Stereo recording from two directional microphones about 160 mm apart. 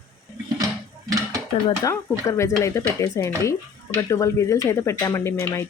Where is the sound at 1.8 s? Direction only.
20° left (ahead or behind).